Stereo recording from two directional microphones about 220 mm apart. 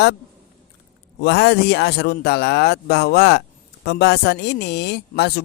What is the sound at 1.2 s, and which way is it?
Speech, 50° left (ahead or behind).